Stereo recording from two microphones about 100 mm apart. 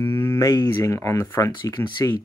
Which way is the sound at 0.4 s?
40° left (ahead or behind).